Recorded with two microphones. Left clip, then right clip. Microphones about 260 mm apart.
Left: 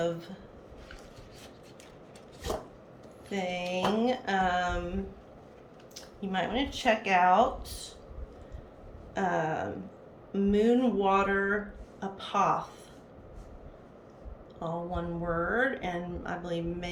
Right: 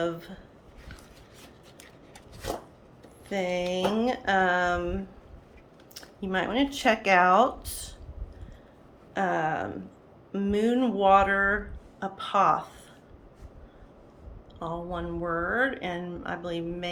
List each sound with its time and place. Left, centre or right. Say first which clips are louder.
3.2 s speech: right 5 dB; centre
9.1 s speech: right 3 dB; centre
14.6 s speech: right 1 dB; centre